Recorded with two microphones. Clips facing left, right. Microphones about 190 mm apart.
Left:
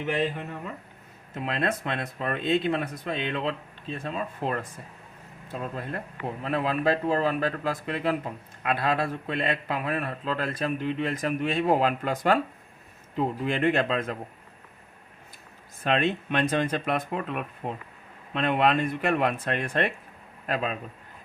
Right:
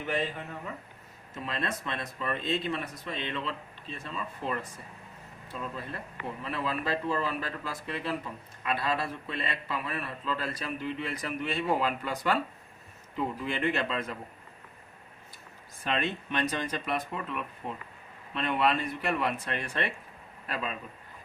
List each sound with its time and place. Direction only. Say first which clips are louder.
1.4 s a man's voice: left 6 dB; 60° left (ahead or behind)
15.8 s a man's voice: left 6 dB; 55° left (ahead or behind)